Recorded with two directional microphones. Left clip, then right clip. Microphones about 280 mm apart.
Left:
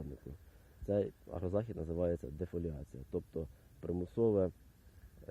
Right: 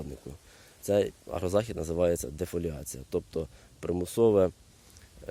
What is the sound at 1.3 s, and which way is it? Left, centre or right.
Speech, right.